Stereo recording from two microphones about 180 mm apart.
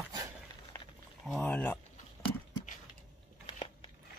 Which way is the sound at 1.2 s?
5° left (ahead or behind).